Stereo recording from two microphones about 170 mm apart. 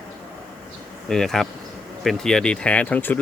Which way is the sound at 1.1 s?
Centre (ahead or behind).